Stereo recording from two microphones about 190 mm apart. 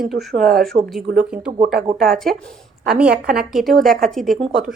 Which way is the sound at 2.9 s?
5° right (ahead or behind).